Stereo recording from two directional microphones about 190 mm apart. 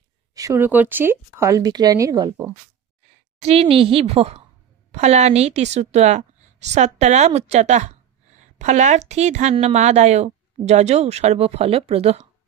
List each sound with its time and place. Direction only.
0.3 s speech: 15° right (ahead or behind)
3.4 s a woman's voice: 30° right (ahead or behind)